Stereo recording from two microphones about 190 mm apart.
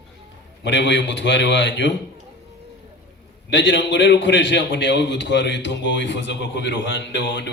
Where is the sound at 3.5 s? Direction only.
70° left (ahead or behind).